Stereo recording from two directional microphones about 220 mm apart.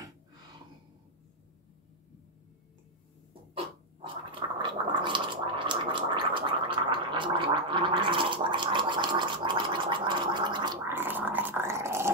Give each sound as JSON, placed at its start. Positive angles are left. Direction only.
{"t": 3.5, "sound": "gargling", "side_deg": -25}